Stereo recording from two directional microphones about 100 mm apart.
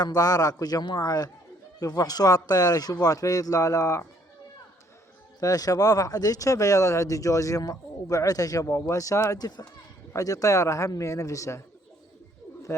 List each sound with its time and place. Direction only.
0.0 s speech: 40° left (ahead or behind)
5.4 s speech: 35° left (ahead or behind)